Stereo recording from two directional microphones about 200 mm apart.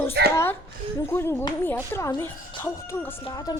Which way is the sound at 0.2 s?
55° right (ahead or behind).